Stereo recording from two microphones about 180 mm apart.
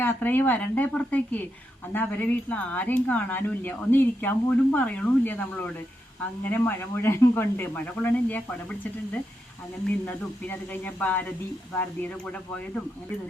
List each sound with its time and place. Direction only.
0.0 s speech: 10° left (ahead or behind)
10.1 s speech: 10° left (ahead or behind)